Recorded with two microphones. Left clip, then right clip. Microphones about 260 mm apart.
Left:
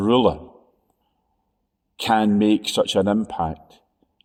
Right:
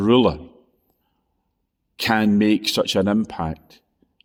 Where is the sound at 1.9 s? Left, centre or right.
Right.